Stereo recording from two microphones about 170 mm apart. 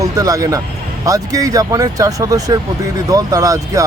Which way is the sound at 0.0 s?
20° right (ahead or behind).